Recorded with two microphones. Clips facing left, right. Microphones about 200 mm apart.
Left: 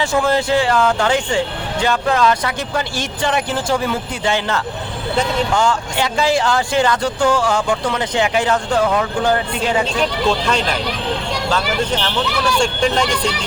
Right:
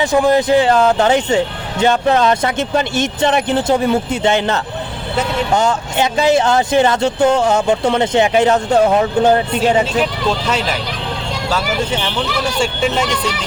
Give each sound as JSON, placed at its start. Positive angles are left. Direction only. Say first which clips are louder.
{"t": 0.0, "sound": "speech", "louder": "right 4 dB", "side_deg": -15}
{"t": 10.0, "sound": "speech", "louder": "even", "side_deg": -5}